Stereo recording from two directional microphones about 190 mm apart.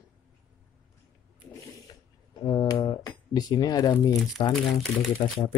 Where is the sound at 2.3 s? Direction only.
20° left (ahead or behind).